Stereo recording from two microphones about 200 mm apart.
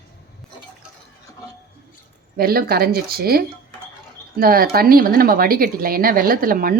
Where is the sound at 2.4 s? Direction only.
50° right (ahead or behind).